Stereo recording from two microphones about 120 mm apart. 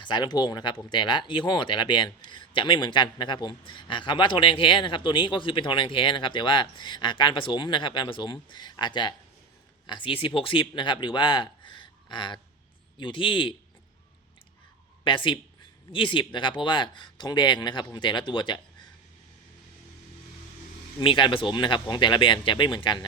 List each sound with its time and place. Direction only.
0.0 s speech: 40° left (ahead or behind)
15.0 s speech: 45° left (ahead or behind)
21.0 s speech: 45° left (ahead or behind)